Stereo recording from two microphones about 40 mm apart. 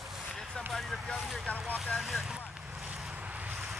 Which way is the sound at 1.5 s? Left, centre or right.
Left.